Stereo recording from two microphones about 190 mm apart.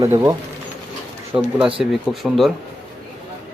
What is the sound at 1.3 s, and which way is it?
Speech, 5° right (ahead or behind).